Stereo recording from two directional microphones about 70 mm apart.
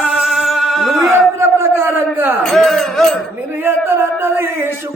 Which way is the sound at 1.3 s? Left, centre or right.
Right.